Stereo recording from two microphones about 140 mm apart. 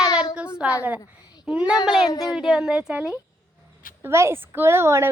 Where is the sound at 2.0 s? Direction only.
30° left (ahead or behind).